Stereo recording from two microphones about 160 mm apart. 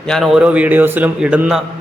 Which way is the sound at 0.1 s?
Centre (ahead or behind).